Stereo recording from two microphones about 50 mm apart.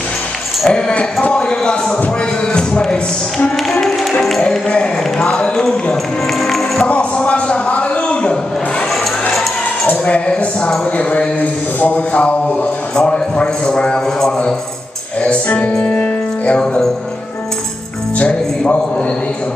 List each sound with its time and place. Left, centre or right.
0.7 s a man's voice: centre
2.5 s a sound: centre
6.9 s a sound: left
9.8 s a man's voice: left
12.9 s a man's voice: centre
15.2 s a man's voice: left